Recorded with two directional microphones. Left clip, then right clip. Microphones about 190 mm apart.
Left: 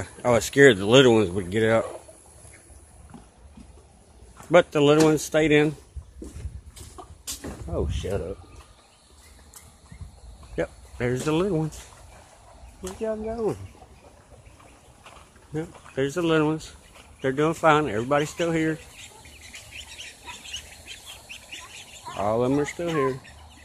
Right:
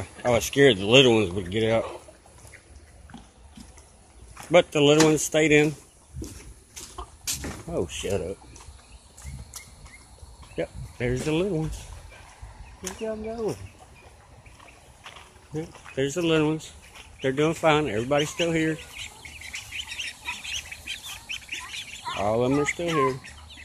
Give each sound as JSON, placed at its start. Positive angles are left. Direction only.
{"t": 0.3, "sound": "speech", "side_deg": 20}
{"t": 4.5, "sound": "speech", "side_deg": 10}
{"t": 7.6, "sound": "speech", "side_deg": -10}
{"t": 10.5, "sound": "speech", "side_deg": 10}
{"t": 13.0, "sound": "speech", "side_deg": 30}
{"t": 15.5, "sound": "speech", "side_deg": 10}
{"t": 19.8, "sound": "duck", "side_deg": -15}
{"t": 22.1, "sound": "speech", "side_deg": 5}
{"t": 22.8, "sound": "chicken", "side_deg": 0}